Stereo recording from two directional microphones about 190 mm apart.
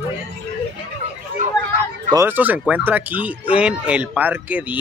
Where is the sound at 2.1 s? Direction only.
10° right (ahead or behind).